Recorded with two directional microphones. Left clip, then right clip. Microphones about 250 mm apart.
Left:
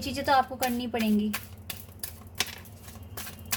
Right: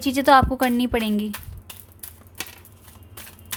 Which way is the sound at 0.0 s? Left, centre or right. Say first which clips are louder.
Right 9 dB; right.